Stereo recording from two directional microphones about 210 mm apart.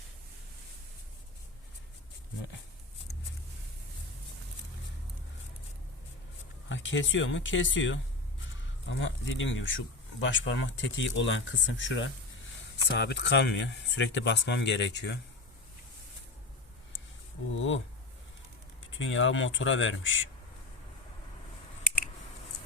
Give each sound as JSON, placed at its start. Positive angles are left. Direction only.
{"t": 6.7, "sound": "speech", "side_deg": 60}
{"t": 17.5, "sound": "speech", "side_deg": 65}
{"t": 18.9, "sound": "speech", "side_deg": 65}